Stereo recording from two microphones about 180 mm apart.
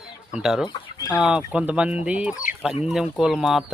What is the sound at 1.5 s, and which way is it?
Speech, 5° right (ahead or behind).